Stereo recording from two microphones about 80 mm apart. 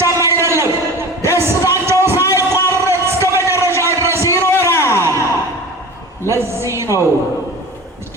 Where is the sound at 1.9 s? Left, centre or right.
Right.